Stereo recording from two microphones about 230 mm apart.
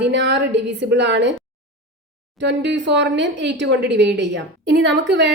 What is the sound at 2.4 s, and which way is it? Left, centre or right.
A woman's voice, right.